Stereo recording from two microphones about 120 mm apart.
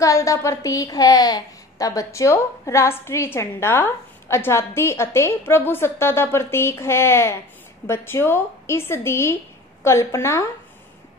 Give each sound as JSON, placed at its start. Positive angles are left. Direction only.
{"t": 0.0, "sound": "a woman's voice", "side_deg": 25}